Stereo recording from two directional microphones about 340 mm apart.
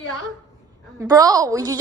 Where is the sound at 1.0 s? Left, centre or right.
Centre.